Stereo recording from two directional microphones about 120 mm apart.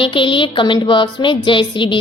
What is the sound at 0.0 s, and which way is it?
A woman's voice, 45° left (ahead or behind).